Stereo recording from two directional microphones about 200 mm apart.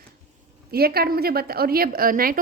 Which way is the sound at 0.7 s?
50° right (ahead or behind).